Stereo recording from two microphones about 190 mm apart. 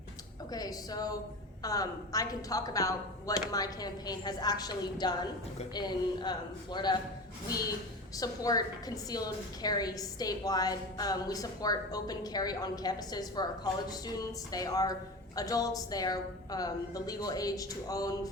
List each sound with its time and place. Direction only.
0.5 s a woman's voice: 20° left (ahead or behind)
8.1 s a woman's voice: 20° left (ahead or behind)